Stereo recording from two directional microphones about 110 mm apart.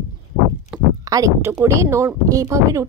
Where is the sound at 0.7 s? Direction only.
10° right (ahead or behind).